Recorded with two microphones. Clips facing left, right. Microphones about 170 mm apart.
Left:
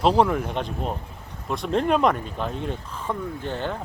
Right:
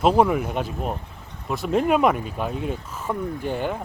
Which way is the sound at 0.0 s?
5° right (ahead or behind).